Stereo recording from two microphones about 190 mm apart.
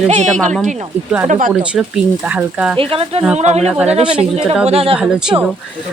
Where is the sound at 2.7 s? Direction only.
30° right (ahead or behind).